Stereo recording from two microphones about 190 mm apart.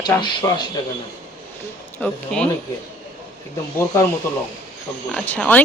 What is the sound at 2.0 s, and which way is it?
Speech, 5° left (ahead or behind).